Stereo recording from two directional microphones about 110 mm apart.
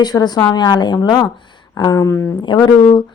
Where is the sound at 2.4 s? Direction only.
40° left (ahead or behind).